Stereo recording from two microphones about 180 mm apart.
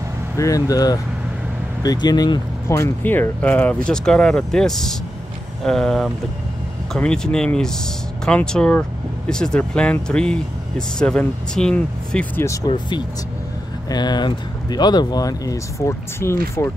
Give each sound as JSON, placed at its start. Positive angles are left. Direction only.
{"t": 0.4, "sound": "speech", "side_deg": 20}
{"t": 12.6, "sound": "speech", "side_deg": 25}